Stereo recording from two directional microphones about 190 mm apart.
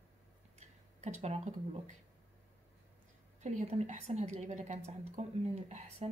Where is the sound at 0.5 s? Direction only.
35° right (ahead or behind).